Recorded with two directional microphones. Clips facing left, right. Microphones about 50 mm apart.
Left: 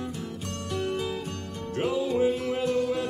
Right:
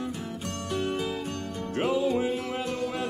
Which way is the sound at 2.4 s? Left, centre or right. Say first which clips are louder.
Left 4 dB; centre.